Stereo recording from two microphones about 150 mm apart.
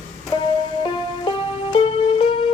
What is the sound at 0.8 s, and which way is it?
Music, 35° left (ahead or behind).